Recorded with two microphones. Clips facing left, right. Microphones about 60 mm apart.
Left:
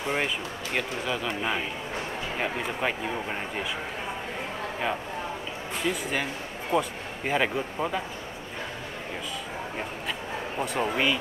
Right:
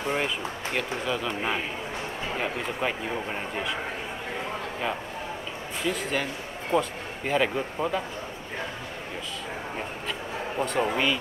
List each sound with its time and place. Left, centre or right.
0.0 s a man's voice: centre
2.8 s a man's voice: centre
5.9 s speech: centre
10.6 s a man's voice: centre